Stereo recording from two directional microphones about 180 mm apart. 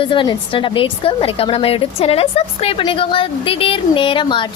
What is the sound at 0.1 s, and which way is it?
A woman's voice, 25° left (ahead or behind).